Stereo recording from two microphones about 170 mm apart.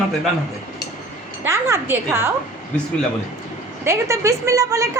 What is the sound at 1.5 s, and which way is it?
Speech, 15° right (ahead or behind).